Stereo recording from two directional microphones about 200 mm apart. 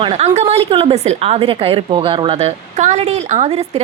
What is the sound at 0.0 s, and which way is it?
A woman's voice, 30° right (ahead or behind).